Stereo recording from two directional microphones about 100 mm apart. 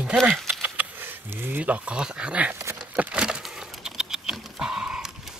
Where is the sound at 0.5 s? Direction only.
15° right (ahead or behind).